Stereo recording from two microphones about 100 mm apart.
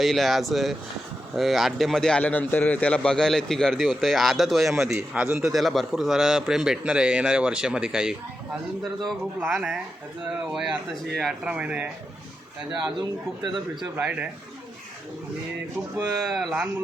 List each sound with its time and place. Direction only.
0.0 s a man's voice: centre (ahead or behind)
4.9 s a man's voice: 20° right (ahead or behind)
5.2 s a man's voice: 5° right (ahead or behind)
11.4 s a man's voice: 10° right (ahead or behind)
13.0 s speech: 45° right (ahead or behind)
13.9 s a man's voice: 15° right (ahead or behind)
16.2 s a man's voice: centre (ahead or behind)